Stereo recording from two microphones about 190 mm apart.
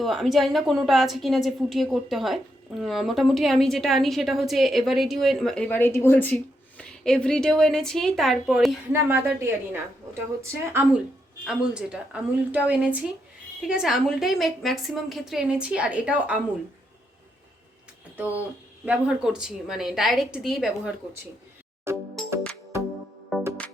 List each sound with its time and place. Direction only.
0.0 s a woman's voice: centre (ahead or behind)
8.9 s a woman's voice: 10° right (ahead or behind)
18.9 s a woman's voice: 5° right (ahead or behind)
21.9 s music: 15° right (ahead or behind)